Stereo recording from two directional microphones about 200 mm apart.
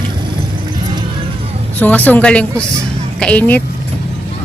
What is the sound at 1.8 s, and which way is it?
Speech, 10° left (ahead or behind).